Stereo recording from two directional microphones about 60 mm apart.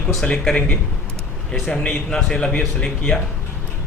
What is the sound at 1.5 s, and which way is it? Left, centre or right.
Speech, centre.